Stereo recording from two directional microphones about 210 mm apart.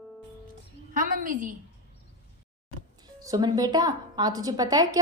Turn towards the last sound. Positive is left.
turn(degrees=-15)  # may be behind; listen again after turning